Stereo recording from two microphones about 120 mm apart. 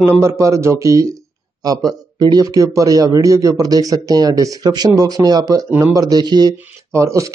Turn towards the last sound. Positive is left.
turn(degrees=-25)  # may be behind; listen again after turning